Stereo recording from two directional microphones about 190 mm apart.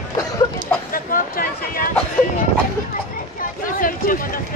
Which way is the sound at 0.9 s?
50° left (ahead or behind).